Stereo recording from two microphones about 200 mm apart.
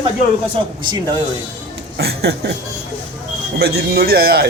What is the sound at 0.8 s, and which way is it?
Speech, 20° right (ahead or behind).